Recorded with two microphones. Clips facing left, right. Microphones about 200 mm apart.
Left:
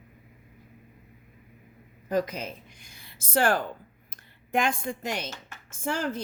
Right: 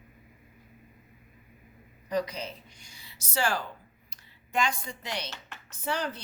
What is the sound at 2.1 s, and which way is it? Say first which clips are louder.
Speech: left 3 dB; 50° left (ahead or behind).